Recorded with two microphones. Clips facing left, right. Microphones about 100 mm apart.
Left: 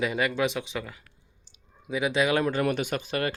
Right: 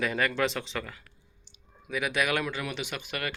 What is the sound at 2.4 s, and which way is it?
Speech, 45° left (ahead or behind).